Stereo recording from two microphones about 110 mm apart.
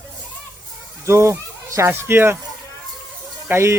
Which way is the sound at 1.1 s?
25° right (ahead or behind).